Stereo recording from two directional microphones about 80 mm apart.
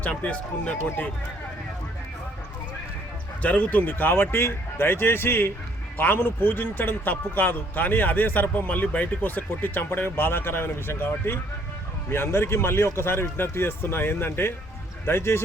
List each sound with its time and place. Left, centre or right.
0.0 s speech: centre
3.4 s a man's voice: centre